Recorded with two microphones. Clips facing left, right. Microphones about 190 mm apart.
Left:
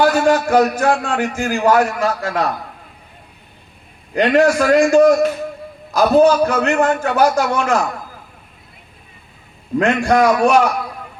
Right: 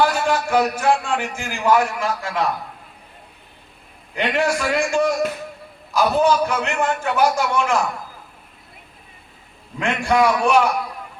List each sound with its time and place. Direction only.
0.0 s a man's voice: 40° left (ahead or behind)
4.1 s a man's voice: 40° left (ahead or behind)
9.7 s a man's voice: 40° left (ahead or behind)